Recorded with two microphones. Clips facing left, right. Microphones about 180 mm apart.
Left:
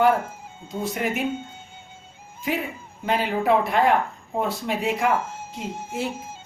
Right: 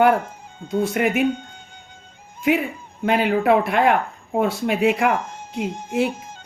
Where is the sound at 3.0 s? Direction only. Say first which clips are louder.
Right 5 dB; 60° right (ahead or behind).